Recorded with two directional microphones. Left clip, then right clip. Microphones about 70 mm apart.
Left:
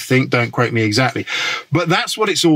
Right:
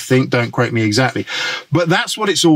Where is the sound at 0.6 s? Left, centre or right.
Left.